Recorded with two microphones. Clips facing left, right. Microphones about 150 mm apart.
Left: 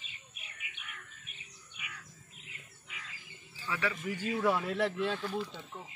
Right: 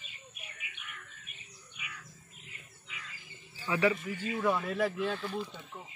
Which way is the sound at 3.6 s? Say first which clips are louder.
Right 7 dB; 20° right (ahead or behind).